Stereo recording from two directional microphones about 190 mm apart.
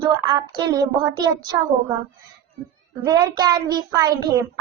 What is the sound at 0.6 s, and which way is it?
Speech, 20° right (ahead or behind).